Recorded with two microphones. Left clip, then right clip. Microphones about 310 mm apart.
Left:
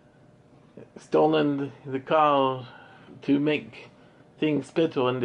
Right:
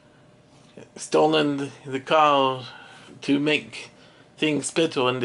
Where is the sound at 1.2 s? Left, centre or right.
Centre.